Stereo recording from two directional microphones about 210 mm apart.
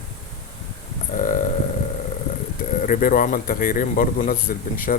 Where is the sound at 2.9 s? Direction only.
40° left (ahead or behind).